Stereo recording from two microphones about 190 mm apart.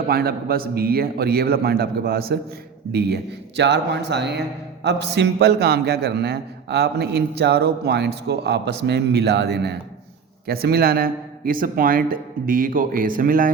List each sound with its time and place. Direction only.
0.1 s a man's voice: 55° right (ahead or behind)